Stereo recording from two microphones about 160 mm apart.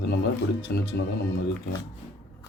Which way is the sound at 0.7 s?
85° left.